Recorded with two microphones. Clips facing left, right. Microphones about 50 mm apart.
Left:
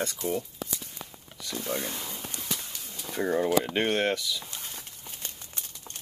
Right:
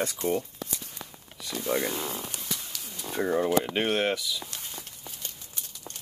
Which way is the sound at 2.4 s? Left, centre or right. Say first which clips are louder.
Left 1 dB; centre.